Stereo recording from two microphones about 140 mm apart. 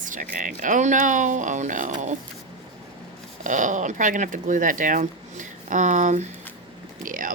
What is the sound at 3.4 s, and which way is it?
Speech, 65° right (ahead or behind).